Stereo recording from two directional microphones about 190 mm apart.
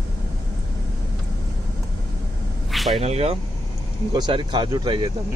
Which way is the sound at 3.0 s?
35° right (ahead or behind).